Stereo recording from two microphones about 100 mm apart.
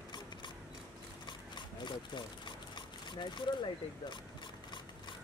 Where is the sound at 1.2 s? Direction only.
50° left (ahead or behind).